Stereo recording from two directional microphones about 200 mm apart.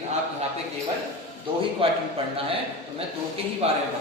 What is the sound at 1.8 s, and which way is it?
Speech, 30° right (ahead or behind).